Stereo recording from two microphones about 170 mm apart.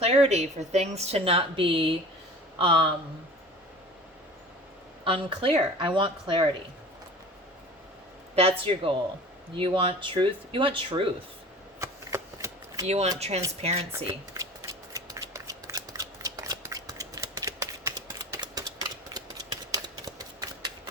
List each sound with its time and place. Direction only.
0.0 s a woman's voice: 35° right (ahead or behind)
5.0 s a woman's voice: 30° right (ahead or behind)
8.4 s a woman's voice: 35° right (ahead or behind)
11.8 s shuffling cards: 15° right (ahead or behind)
12.9 s a woman's voice: 40° right (ahead or behind)
14.1 s shuffling cards: 20° right (ahead or behind)
20.1 s a sound: 25° right (ahead or behind)